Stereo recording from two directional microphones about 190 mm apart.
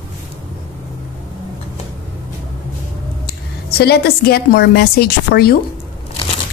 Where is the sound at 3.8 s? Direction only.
55° left (ahead or behind).